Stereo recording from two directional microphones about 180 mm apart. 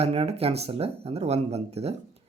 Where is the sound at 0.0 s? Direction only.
35° right (ahead or behind).